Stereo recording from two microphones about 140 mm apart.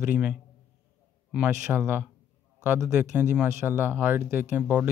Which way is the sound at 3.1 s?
10° right (ahead or behind).